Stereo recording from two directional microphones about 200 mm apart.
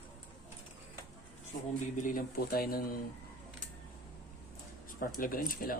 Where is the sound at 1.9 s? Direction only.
40° left (ahead or behind).